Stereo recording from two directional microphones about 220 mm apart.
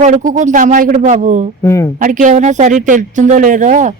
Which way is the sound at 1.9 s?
35° right (ahead or behind).